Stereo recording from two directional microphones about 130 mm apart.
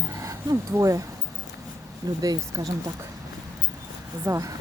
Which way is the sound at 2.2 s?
30° right (ahead or behind).